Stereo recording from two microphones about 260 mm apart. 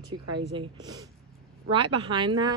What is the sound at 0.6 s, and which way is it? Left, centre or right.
A woman's voice, centre.